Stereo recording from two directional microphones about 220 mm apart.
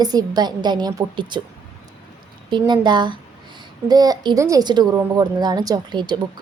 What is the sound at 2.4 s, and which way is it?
A woman's voice, 20° right (ahead or behind).